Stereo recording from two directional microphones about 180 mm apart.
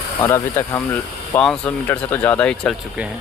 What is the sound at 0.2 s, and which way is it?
Speech, 15° left (ahead or behind).